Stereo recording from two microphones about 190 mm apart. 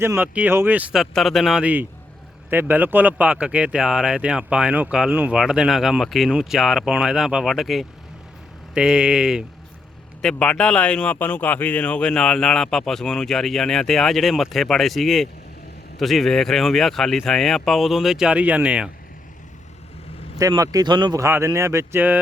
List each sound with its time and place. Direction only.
0.0 s speech: 10° right (ahead or behind)
20.4 s speech: 20° right (ahead or behind)